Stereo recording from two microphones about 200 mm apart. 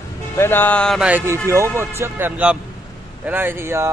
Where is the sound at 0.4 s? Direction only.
10° left (ahead or behind).